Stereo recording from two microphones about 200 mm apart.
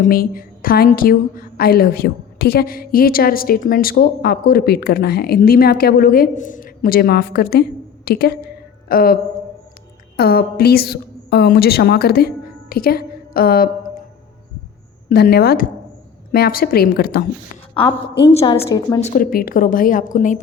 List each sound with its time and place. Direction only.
0.0 s a woman's voice: 45° left (ahead or behind)
10.2 s a woman's voice: 50° left (ahead or behind)
15.1 s a woman's voice: 50° left (ahead or behind)
18.3 s a woman's voice: 30° left (ahead or behind)